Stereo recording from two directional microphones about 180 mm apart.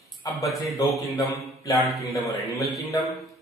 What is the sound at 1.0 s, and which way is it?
Mantra, 15° left (ahead or behind).